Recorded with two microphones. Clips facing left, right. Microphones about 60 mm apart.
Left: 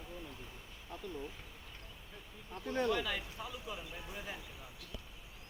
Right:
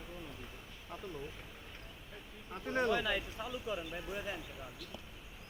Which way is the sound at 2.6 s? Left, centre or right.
Right.